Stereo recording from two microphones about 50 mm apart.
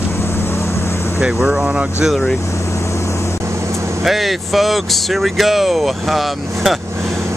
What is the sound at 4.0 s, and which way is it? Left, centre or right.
Speech, centre.